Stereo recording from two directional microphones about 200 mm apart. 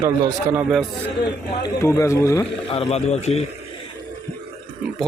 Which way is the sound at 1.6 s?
15° left (ahead or behind).